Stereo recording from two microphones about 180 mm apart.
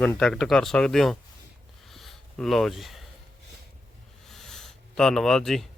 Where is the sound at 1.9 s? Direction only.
Centre (ahead or behind).